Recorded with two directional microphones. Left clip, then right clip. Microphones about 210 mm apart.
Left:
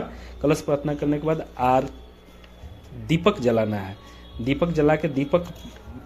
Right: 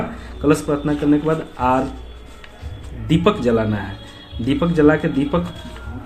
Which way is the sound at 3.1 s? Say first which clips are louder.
Right 4 dB; 35° left (ahead or behind).